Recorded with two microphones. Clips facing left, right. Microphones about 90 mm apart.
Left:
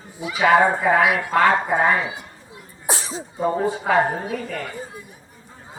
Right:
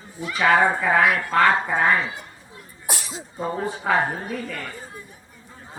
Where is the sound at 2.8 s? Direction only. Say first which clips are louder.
Left 5 dB; 30° left (ahead or behind).